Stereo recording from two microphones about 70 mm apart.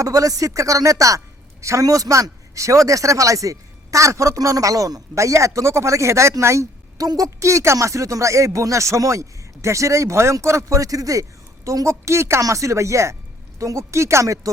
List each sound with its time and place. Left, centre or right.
0.0 s speech: right
5.1 s speech: right
7.0 s a woman's voice: right
7.3 s speech: right